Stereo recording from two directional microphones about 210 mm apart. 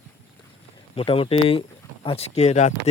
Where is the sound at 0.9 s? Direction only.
25° left (ahead or behind).